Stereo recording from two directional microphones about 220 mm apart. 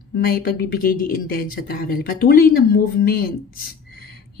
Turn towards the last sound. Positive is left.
turn(degrees=45)  # may be behind; listen again after turning